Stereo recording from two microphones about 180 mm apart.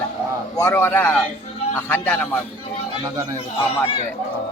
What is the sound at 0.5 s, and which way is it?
A man's voice, 15° left (ahead or behind).